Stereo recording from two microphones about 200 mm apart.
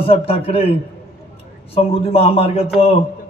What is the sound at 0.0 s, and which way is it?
A man's voice, 30° left (ahead or behind).